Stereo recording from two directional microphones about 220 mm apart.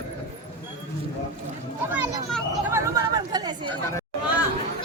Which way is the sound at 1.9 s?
10° right (ahead or behind).